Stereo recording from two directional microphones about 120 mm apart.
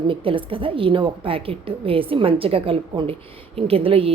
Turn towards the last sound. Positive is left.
turn(degrees=-50)  # may be behind; listen again after turning